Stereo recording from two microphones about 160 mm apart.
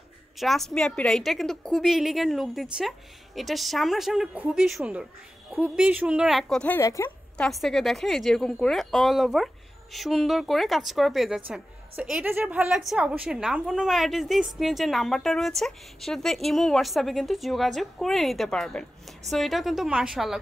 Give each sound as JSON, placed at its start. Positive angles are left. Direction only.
{"t": 0.4, "sound": "speech", "side_deg": 0}
{"t": 6.8, "sound": "a woman's voice", "side_deg": 20}
{"t": 7.3, "sound": "speech", "side_deg": 0}